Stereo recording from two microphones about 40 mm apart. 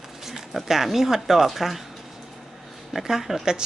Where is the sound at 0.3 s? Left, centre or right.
Centre.